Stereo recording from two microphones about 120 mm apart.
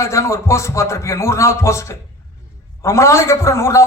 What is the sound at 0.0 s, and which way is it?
A man's voice, 25° left (ahead or behind).